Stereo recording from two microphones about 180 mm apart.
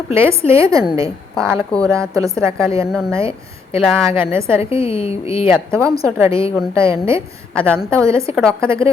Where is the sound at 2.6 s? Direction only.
30° left (ahead or behind).